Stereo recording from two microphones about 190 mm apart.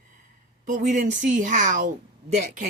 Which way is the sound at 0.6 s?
40° right (ahead or behind).